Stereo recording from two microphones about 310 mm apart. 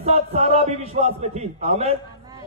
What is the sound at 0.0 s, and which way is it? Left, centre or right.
Speech, centre.